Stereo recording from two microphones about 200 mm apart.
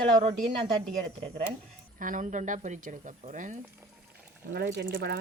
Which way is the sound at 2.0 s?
40° right (ahead or behind).